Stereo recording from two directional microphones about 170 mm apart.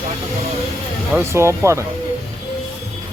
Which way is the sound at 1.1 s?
15° right (ahead or behind).